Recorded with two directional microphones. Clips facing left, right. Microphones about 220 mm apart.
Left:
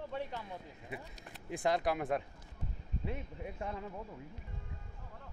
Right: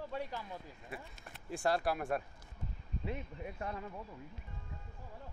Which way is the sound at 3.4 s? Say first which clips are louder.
Left 1 dB; 20° left (ahead or behind).